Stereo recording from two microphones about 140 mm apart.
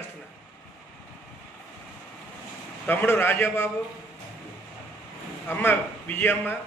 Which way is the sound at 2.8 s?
10° left (ahead or behind).